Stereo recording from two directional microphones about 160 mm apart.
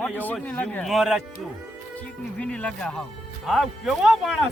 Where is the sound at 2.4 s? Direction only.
5° left (ahead or behind).